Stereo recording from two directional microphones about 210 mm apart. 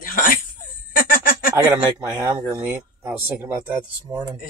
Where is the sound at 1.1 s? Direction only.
40° left (ahead or behind).